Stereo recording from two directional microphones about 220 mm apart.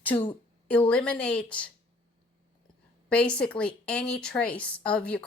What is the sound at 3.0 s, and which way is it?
A woman's voice, 5° left (ahead or behind).